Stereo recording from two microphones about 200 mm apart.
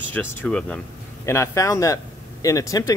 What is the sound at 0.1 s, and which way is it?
Speech, 5° left (ahead or behind).